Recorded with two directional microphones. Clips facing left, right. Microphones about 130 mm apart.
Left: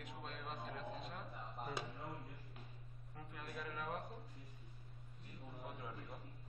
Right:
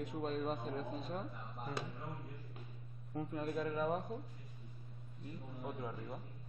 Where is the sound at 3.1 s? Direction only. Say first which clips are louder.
Right 12 dB; 30° right (ahead or behind).